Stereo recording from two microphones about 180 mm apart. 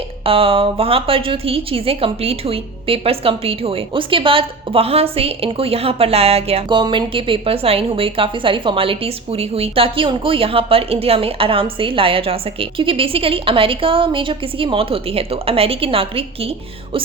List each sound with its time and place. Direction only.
0.3 s a woman's voice: 30° right (ahead or behind)